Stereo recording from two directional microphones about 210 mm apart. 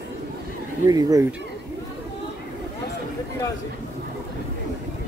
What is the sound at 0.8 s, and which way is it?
Speech, 15° right (ahead or behind).